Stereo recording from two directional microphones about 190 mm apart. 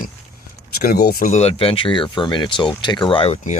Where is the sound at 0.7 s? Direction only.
50° left (ahead or behind).